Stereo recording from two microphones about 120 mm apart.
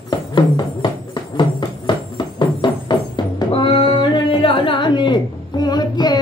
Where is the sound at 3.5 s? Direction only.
45° left (ahead or behind).